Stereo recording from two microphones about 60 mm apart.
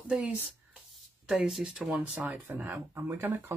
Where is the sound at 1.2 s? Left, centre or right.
Centre.